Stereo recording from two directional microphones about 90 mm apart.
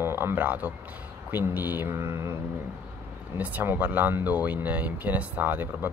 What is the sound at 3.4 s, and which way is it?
Speech, 20° right (ahead or behind).